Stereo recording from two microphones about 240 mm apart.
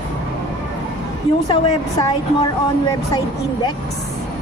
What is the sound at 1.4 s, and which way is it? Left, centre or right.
Speech, centre.